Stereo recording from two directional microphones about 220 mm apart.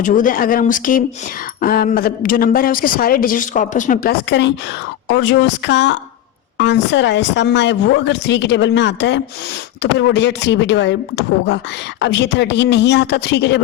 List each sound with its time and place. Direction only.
0.0 s speech: 35° left (ahead or behind)
4.3 s speech: 50° left (ahead or behind)